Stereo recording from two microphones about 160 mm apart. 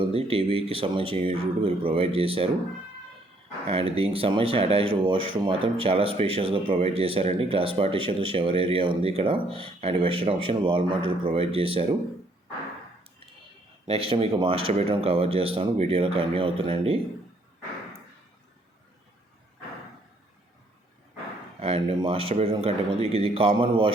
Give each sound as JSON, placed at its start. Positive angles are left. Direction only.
{"t": 0.1, "sound": "speech", "side_deg": -35}
{"t": 3.7, "sound": "speech", "side_deg": -35}
{"t": 13.8, "sound": "speech", "side_deg": -35}
{"t": 21.6, "sound": "speech", "side_deg": -35}